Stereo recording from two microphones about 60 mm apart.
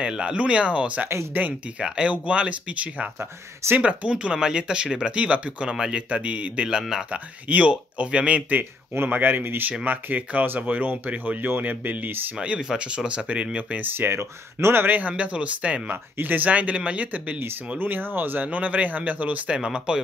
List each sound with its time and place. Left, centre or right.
0.0 s speech: centre
3.2 s speech: right
3.8 s speech: centre
6.8 s speech: centre
7.1 s speech: right
12.4 s speech: centre; by 15.0 s right
15.0 s speech: right
19.5 s speech: centre